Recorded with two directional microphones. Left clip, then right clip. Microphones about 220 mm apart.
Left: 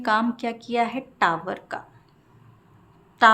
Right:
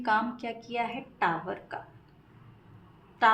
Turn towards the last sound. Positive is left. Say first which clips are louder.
# left 7 dB
turn(degrees=40)  # may be behind; listen again after turning